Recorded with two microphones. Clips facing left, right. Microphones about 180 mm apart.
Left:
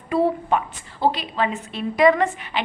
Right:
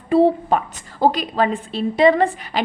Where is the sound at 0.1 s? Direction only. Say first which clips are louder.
Right 5 dB; 30° right (ahead or behind).